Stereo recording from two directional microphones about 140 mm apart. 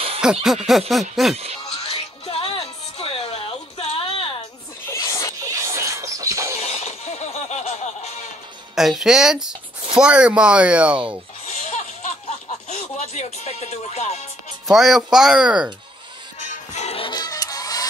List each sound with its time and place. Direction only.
0.2 s a sound: 5° right (ahead or behind)
0.7 s speech: centre (ahead or behind)
1.9 s music: 40° left (ahead or behind)
3.0 s a sound: 45° left (ahead or behind)
4.9 s music: 20° left (ahead or behind)
5.4 s music: 20° right (ahead or behind)
6.6 s music: 50° left (ahead or behind)
8.7 s speech: centre (ahead or behind)
11.4 s a sound: 50° left (ahead or behind)
14.7 s speech: centre (ahead or behind)
16.4 s music: 55° left (ahead or behind)
17.1 s music: 25° left (ahead or behind)